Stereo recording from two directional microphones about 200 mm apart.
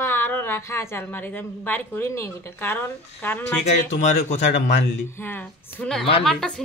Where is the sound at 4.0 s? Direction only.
35° left (ahead or behind).